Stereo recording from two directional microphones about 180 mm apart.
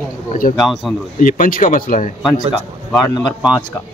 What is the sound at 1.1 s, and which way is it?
Speech, 50° left (ahead or behind).